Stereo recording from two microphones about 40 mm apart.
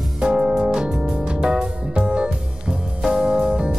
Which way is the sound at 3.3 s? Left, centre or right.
Right.